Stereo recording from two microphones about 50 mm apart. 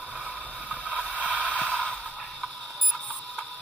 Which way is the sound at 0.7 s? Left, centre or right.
Right.